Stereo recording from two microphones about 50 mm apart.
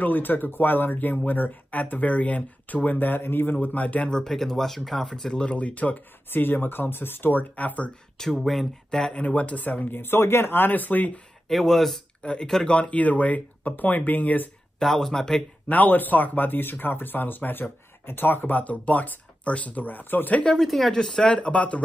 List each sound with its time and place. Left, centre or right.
0.0 s speech: left
3.6 s speech: left
4.0 s speech: centre
5.0 s speech: centre
6.3 s speech: left
8.2 s speech: centre
8.9 s speech: centre
9.2 s speech: left
11.4 s speech: centre
12.2 s speech: centre; by 14.5 s left
14.8 s speech: centre
15.7 s speech: left
20.5 s speech: centre; by 21.8 s left